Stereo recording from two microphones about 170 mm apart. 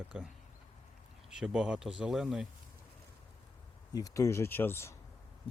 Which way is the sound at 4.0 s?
20° left (ahead or behind).